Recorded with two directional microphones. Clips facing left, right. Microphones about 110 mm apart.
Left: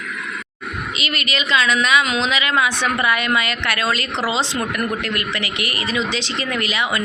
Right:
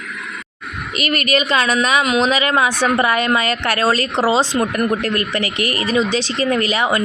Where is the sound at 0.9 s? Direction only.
45° right (ahead or behind).